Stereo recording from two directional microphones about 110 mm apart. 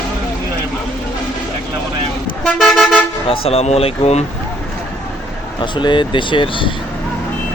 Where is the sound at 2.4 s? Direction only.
5° left (ahead or behind).